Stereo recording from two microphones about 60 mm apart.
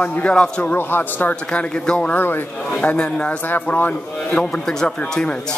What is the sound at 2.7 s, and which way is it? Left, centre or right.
Speech, left.